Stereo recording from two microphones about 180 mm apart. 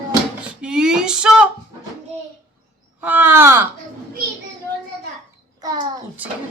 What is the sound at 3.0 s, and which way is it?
Speech, 10° right (ahead or behind).